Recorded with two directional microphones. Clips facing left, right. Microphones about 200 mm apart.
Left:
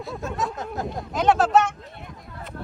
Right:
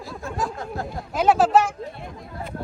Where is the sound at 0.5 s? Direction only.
20° left (ahead or behind).